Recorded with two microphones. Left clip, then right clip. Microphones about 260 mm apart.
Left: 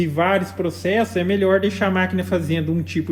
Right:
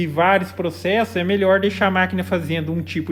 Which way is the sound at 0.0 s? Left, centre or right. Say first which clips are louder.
Right 2 dB; right.